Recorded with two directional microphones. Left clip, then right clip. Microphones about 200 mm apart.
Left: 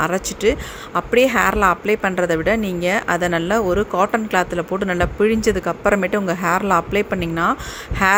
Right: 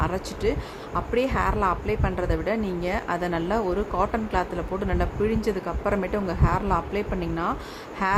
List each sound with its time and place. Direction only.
0.0 s a woman's voice: 15° left (ahead or behind)